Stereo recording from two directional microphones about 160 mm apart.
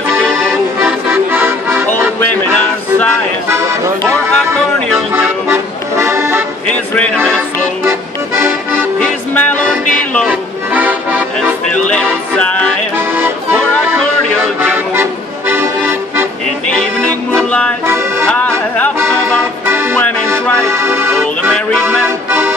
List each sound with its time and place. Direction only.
0.1 s accordion: centre (ahead or behind)
0.8 s music: 15° right (ahead or behind)
2.1 s music: 10° left (ahead or behind)
3.4 s music: 20° right (ahead or behind)
5.5 s accordion: 15° right (ahead or behind)
8.4 s accordion: 15° right (ahead or behind)
9.0 s music: 10° left (ahead or behind)
10.2 s accordion: 10° right (ahead or behind)
11.7 s music: 5° left (ahead or behind)
12.9 s music: 15° right (ahead or behind)
14.4 s accordion: 15° right (ahead or behind)
16.6 s music: 5° left (ahead or behind)
17.8 s music: 15° right (ahead or behind)
18.9 s accordion: 15° right (ahead or behind)